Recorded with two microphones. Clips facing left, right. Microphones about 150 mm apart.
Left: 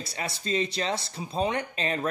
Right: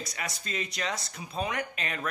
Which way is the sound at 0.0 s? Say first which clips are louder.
Left 4 dB; 30° left (ahead or behind).